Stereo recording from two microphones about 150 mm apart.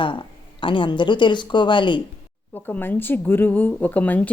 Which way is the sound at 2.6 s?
10° left (ahead or behind).